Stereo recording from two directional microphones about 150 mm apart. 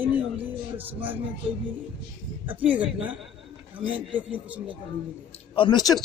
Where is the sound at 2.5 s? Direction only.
10° right (ahead or behind).